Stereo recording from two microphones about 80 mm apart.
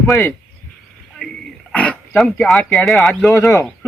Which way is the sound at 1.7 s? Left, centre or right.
Centre.